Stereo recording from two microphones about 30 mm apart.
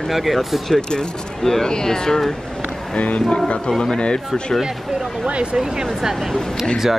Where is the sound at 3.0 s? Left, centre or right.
Left.